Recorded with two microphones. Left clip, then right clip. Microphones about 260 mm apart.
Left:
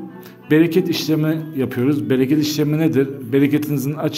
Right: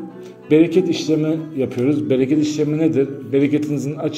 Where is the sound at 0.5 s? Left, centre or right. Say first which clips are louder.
Right 1 dB; left.